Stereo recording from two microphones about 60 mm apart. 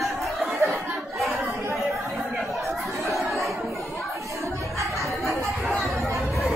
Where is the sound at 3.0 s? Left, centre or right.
Centre.